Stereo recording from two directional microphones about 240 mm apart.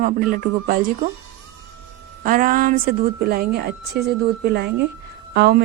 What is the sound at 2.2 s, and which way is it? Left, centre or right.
A woman's voice, right.